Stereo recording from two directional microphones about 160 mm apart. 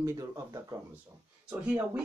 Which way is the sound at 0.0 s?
20° right (ahead or behind).